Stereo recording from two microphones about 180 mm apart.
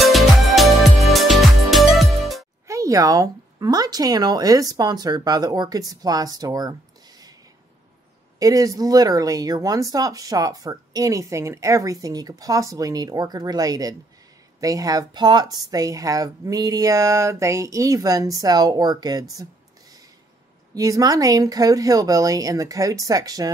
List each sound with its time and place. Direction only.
0.0 s music: centre (ahead or behind)
2.6 s speech: 15° right (ahead or behind)
8.4 s speech: 20° right (ahead or behind)
20.7 s speech: 20° right (ahead or behind)